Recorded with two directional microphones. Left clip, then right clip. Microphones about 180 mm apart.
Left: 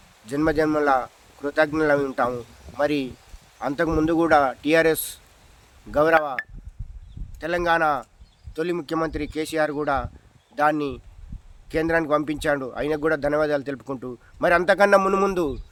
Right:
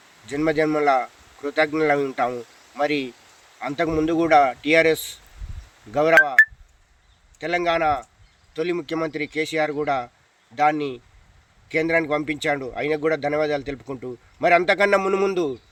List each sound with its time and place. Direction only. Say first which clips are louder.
0.3 s speech: even; 25° left (ahead or behind)
7.4 s speech: even; 25° left (ahead or behind)